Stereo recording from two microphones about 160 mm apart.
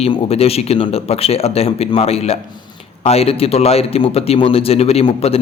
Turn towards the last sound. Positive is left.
turn(degrees=40)  # may be behind; listen again after turning